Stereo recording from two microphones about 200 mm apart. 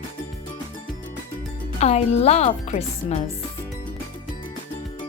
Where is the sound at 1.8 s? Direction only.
30° left (ahead or behind).